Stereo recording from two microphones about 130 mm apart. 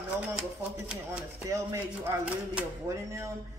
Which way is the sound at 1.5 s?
20° right (ahead or behind).